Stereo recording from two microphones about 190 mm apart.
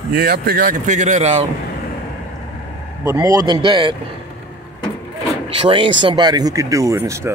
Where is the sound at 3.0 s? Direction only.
15° right (ahead or behind).